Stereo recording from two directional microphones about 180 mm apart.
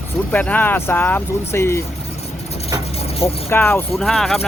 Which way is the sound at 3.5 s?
10° left (ahead or behind).